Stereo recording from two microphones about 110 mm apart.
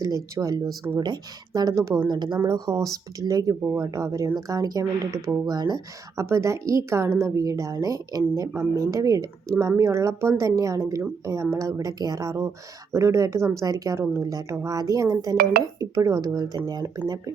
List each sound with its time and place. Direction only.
0.0 s speech: 30° right (ahead or behind)
2.0 s a woman's voice: 40° right (ahead or behind)
6.2 s a woman's voice: 25° right (ahead or behind)